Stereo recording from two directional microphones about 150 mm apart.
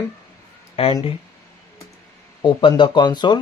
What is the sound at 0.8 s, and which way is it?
Speech, 40° left (ahead or behind).